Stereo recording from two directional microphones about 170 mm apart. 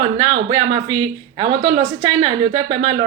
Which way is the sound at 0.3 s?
30° right (ahead or behind).